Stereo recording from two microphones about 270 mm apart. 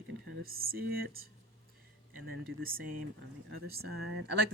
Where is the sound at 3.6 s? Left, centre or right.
Right.